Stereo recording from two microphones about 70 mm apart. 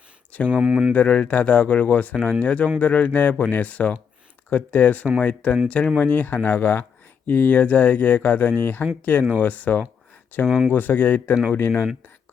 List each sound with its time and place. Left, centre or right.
0.4 s speech: centre
0.9 s speech: centre
10.4 s speech: centre
10.7 s speech: left